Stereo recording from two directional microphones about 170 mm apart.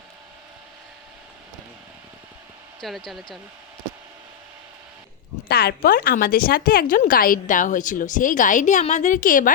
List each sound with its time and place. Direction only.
2.8 s speech: centre (ahead or behind)
5.5 s speech: 70° left (ahead or behind); by 9.5 s 50° left (ahead or behind)